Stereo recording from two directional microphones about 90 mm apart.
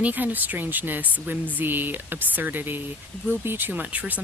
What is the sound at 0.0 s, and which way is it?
Speech, 20° right (ahead or behind).